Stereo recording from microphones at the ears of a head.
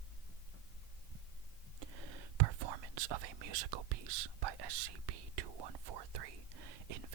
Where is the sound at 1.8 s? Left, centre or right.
Right.